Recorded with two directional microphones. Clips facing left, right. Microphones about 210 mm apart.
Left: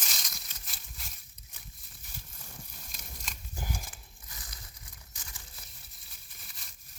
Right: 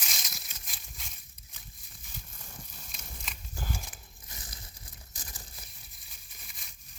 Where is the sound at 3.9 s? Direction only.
25° right (ahead or behind).